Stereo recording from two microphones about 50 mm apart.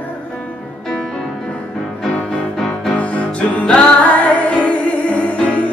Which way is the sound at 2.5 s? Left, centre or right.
Centre.